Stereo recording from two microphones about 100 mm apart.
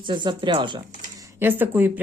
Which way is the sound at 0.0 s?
50° right (ahead or behind).